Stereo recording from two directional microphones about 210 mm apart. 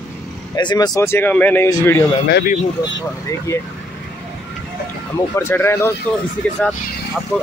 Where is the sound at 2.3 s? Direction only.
50° left (ahead or behind).